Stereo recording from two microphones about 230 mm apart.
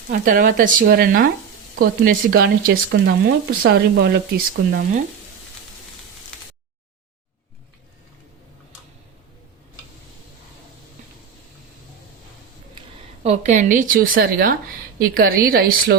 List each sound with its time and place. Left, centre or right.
0.1 s a woman's voice: right
13.2 s a woman's voice: right